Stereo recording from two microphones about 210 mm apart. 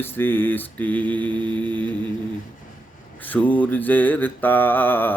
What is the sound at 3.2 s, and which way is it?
Mantra, 10° left (ahead or behind).